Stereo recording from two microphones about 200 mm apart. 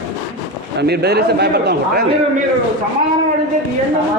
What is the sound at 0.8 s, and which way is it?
A man's voice, 55° right (ahead or behind).